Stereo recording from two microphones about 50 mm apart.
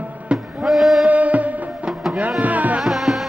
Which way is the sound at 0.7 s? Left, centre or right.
Centre.